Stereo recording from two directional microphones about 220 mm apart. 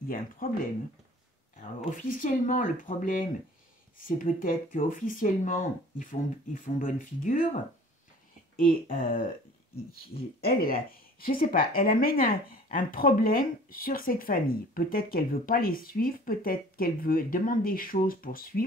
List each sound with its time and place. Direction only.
0.4 s speech: 40° left (ahead or behind)
1.9 s speech: 35° left (ahead or behind)
8.5 s speech: 40° left (ahead or behind)